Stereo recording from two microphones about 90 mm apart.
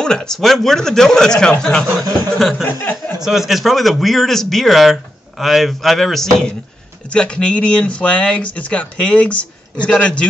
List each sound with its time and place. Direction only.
0.0 s a man's voice: 10° left (ahead or behind)
3.2 s a man's voice: 5° right (ahead or behind); by 10.2 s 15° left (ahead or behind)